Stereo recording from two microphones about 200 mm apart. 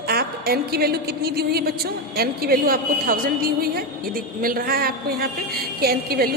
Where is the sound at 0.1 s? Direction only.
50° right (ahead or behind).